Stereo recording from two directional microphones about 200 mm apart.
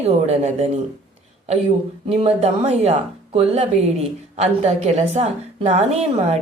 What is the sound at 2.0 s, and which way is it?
A woman's voice, 30° right (ahead or behind).